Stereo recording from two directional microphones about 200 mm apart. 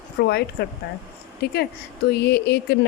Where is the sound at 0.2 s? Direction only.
55° left (ahead or behind).